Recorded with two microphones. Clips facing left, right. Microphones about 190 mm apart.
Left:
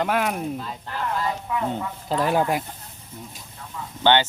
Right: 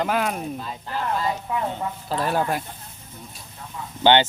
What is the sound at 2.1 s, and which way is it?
Speech, 15° left (ahead or behind).